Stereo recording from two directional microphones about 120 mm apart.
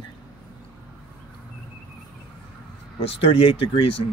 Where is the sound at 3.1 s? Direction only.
50° left (ahead or behind).